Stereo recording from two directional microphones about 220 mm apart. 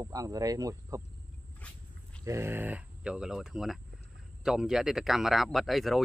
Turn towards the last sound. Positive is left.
turn(degrees=0)  # may be behind; listen again after turning